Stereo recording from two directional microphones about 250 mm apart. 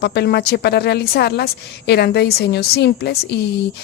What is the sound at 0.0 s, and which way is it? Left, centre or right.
A woman's voice, left.